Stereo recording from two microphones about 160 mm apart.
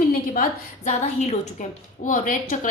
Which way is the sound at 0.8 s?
45° left (ahead or behind).